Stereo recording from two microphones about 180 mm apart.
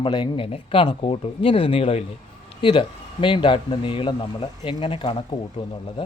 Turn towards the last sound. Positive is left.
turn(degrees=30)  # may be behind; listen again after turning